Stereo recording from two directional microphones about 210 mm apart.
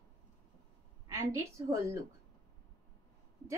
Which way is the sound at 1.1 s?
15° right (ahead or behind).